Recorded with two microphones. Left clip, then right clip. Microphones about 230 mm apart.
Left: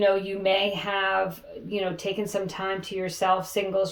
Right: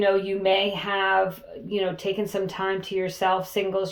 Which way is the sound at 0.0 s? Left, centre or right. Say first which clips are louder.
Right 1 dB; right.